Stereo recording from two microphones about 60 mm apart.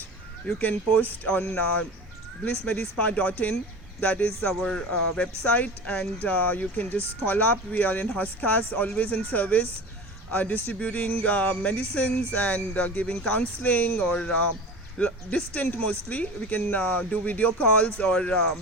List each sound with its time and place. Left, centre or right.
0.4 s speech: left
5.5 s speech: left
14.1 s speech: centre